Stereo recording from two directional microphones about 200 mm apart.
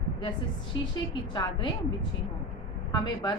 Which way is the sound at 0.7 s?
20° left (ahead or behind).